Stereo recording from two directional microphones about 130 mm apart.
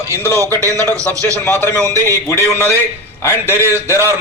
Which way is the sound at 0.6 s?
25° right (ahead or behind).